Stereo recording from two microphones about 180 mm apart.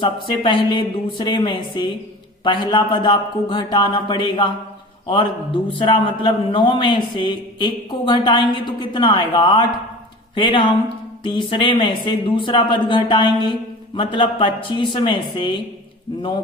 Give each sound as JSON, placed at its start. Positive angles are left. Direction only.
{"t": 0.0, "sound": "a man's voice", "side_deg": 25}